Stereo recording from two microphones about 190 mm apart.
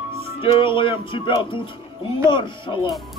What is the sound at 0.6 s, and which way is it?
Music, 25° left (ahead or behind).